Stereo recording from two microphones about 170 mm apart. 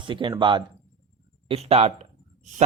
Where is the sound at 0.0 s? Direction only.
30° right (ahead or behind).